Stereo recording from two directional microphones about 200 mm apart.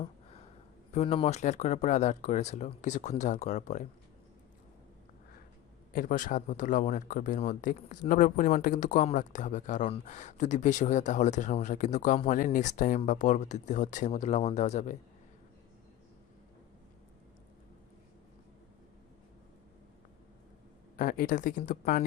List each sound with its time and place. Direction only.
0.9 s speech: 30° left (ahead or behind)
5.9 s speech: 45° left (ahead or behind)
20.9 s speech: 40° left (ahead or behind)